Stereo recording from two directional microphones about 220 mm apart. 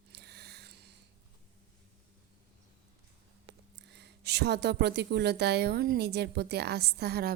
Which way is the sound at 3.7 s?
50° right (ahead or behind).